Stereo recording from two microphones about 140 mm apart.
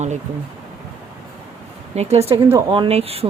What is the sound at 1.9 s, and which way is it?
Speech, 50° right (ahead or behind).